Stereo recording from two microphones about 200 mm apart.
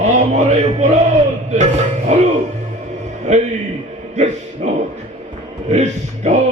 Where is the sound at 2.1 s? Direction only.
35° right (ahead or behind).